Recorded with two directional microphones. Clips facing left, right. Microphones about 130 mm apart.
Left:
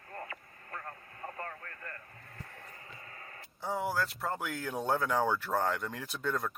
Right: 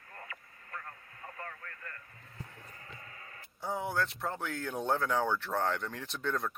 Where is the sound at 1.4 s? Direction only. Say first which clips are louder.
Left 3 dB; 35° left (ahead or behind).